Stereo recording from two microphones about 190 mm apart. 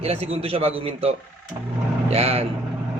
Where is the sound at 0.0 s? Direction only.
35° right (ahead or behind).